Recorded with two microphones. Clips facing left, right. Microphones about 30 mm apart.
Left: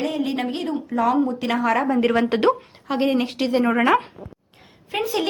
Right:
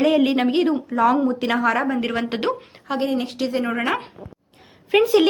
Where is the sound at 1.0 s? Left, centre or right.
Centre.